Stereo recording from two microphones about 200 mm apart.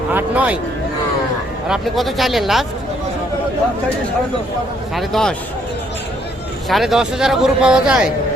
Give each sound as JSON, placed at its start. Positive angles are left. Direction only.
{"t": 0.1, "sound": "speech", "side_deg": -10}
{"t": 1.6, "sound": "a man's voice", "side_deg": 0}
{"t": 4.9, "sound": "a man's voice", "side_deg": 0}
{"t": 6.7, "sound": "a man's voice", "side_deg": 0}